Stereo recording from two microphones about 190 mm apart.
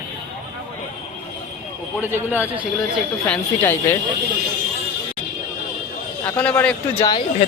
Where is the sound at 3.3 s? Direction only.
10° left (ahead or behind).